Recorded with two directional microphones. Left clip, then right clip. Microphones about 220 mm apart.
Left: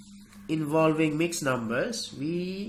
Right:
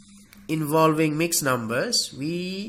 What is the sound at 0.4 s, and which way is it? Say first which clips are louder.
Speech: right 4 dB; 50° right (ahead or behind).